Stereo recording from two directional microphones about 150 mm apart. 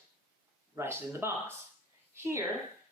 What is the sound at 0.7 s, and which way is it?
A woman's voice, 15° right (ahead or behind).